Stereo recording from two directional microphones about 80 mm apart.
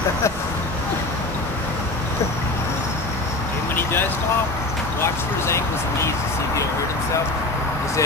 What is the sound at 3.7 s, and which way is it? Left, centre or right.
Vehicle, left.